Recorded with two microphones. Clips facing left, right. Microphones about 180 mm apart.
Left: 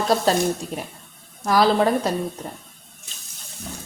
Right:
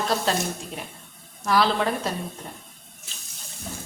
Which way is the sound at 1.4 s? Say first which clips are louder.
Left 4 dB; 40° left (ahead or behind).